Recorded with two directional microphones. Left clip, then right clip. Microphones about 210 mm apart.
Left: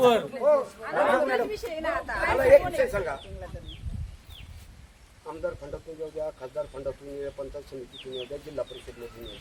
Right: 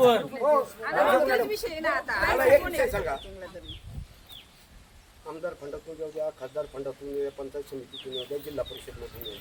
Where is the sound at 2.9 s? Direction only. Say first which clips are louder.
Even; 10° right (ahead or behind).